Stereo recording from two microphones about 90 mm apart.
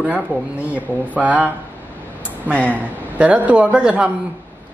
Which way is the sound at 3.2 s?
15° right (ahead or behind).